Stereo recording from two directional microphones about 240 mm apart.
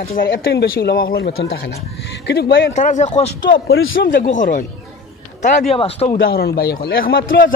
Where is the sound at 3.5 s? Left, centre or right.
Left.